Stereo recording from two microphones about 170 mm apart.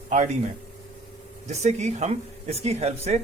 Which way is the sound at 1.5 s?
40° right (ahead or behind).